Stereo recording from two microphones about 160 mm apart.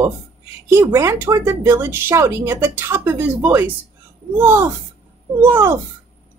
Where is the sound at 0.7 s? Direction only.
15° right (ahead or behind).